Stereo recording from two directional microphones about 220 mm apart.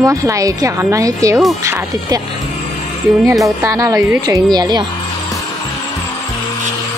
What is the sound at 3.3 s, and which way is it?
A woman's voice, 15° right (ahead or behind).